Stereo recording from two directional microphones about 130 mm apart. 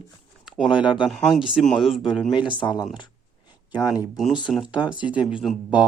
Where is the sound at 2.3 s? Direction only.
40° left (ahead or behind).